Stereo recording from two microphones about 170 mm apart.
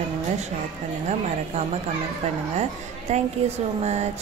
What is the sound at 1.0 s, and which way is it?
Speech, 40° right (ahead or behind).